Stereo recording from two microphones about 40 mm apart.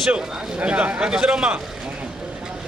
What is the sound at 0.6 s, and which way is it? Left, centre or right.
Speech, right.